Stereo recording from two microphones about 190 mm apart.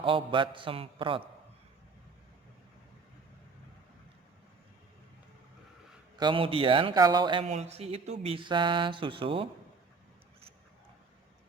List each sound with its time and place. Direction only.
0.0 s speech: 25° right (ahead or behind)
6.1 s speech: 25° right (ahead or behind)